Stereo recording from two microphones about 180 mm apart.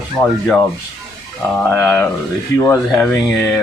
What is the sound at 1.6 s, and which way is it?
Speech, 10° left (ahead or behind).